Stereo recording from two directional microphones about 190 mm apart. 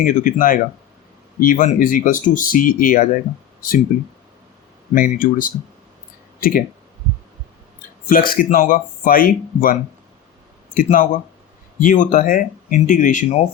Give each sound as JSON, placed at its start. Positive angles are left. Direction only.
{"t": 0.0, "sound": "speech", "side_deg": 45}
{"t": 8.0, "sound": "speech", "side_deg": 50}
{"t": 10.8, "sound": "speech", "side_deg": 40}